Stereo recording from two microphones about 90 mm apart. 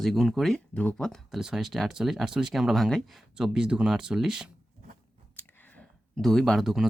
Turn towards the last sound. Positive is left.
turn(degrees=0)  # may be behind; listen again after turning